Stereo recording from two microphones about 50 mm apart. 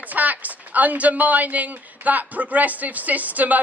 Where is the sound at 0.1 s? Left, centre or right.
Right.